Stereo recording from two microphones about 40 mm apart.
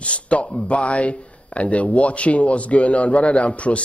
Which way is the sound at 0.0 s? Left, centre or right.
Left.